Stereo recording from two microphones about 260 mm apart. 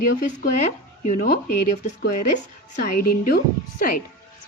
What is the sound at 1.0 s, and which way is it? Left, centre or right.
A woman's voice, left.